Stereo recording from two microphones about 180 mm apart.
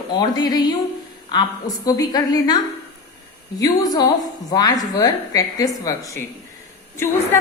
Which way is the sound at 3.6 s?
20° left (ahead or behind).